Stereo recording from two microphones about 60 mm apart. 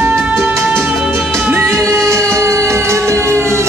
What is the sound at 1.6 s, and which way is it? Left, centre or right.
Music, right.